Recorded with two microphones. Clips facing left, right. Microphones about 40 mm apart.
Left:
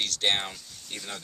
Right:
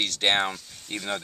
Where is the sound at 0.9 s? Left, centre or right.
Right.